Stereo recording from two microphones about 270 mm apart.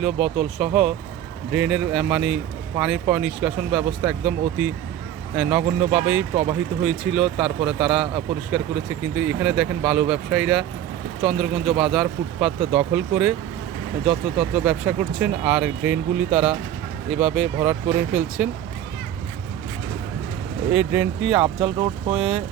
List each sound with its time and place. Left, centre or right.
0.0 s speech: centre
21.3 s speech: centre